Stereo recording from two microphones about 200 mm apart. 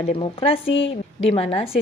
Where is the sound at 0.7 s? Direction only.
70° left (ahead or behind).